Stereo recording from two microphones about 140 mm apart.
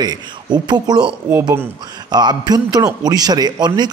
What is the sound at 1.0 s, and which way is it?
Speech, 10° right (ahead or behind).